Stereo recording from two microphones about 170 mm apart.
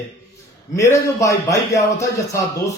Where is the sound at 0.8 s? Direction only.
20° left (ahead or behind).